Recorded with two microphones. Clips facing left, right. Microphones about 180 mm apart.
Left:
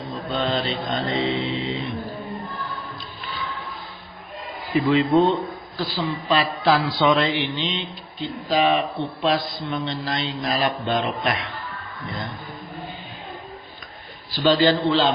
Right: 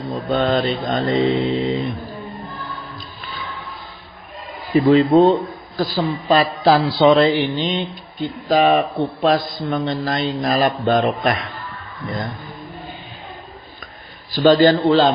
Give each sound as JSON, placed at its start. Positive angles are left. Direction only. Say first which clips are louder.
{"t": 0.3, "sound": "a man's voice", "louder": "right 6 dB", "side_deg": -50}
{"t": 4.9, "sound": "a man's voice", "louder": "right 6 dB", "side_deg": -40}
{"t": 14.3, "sound": "a man's voice", "louder": "right 6 dB", "side_deg": -45}